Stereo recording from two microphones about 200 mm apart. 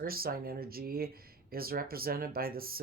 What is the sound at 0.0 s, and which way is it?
Speech, 50° right (ahead or behind).